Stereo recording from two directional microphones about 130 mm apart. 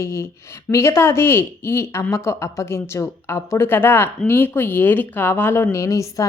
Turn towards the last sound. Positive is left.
turn(degrees=25)  # may be behind; listen again after turning